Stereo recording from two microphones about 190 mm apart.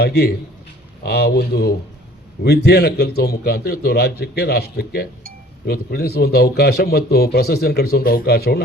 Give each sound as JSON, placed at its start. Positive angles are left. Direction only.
{"t": 0.0, "sound": "a man's voice", "side_deg": 55}